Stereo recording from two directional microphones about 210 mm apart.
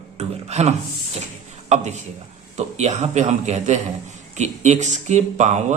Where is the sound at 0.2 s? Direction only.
30° right (ahead or behind).